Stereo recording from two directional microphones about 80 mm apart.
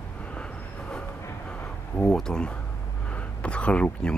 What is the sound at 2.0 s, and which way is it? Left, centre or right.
Speech, centre.